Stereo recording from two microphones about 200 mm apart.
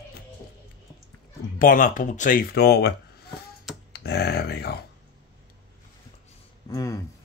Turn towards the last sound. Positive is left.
turn(degrees=15)  # may be behind; listen again after turning